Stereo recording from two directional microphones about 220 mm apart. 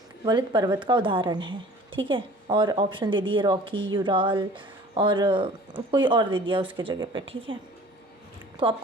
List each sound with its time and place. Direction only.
0.3 s speech: 20° right (ahead or behind)